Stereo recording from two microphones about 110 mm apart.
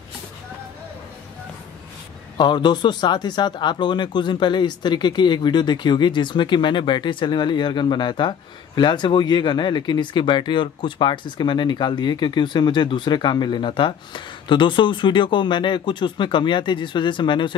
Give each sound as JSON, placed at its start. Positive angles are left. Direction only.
{"t": 2.3, "sound": "speech", "side_deg": 45}